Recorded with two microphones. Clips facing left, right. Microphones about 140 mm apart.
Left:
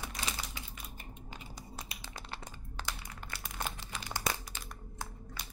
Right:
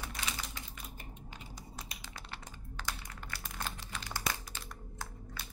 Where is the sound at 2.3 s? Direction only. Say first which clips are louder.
Left 2 dB; 25° left (ahead or behind).